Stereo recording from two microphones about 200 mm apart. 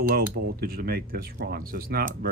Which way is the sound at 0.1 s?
50° right (ahead or behind).